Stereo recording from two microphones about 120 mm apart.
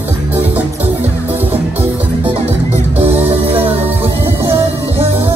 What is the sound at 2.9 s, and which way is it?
Music, 15° right (ahead or behind).